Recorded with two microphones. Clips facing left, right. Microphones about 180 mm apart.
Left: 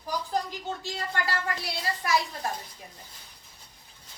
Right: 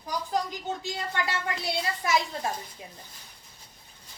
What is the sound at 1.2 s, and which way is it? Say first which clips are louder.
Speech: even; 25° right (ahead or behind).